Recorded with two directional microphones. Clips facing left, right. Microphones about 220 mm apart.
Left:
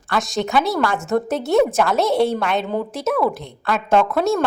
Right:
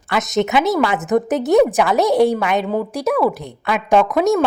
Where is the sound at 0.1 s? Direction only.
20° right (ahead or behind).